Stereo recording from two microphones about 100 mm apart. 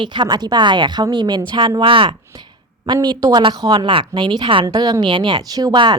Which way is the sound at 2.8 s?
50° right (ahead or behind).